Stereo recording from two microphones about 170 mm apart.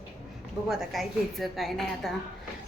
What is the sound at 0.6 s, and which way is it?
A woman's voice, centre (ahead or behind).